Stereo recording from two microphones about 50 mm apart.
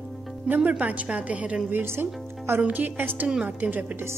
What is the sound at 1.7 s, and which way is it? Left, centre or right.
A woman's voice, right.